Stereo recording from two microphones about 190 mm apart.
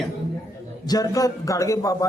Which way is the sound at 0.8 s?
20° left (ahead or behind).